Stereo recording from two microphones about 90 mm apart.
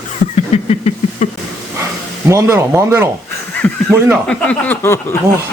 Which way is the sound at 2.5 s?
25° right (ahead or behind).